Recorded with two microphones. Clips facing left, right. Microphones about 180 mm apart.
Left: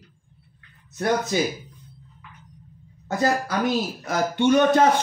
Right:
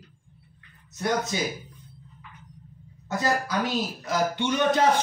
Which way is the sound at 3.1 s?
55° left (ahead or behind).